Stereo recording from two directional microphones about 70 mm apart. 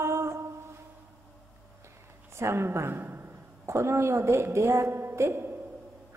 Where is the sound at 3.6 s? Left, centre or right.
Right.